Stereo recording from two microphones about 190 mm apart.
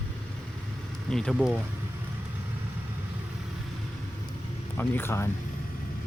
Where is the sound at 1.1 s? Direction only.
5° left (ahead or behind).